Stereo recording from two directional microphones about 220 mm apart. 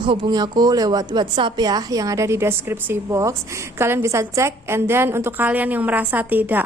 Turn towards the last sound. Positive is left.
turn(degrees=-10)  # may be behind; listen again after turning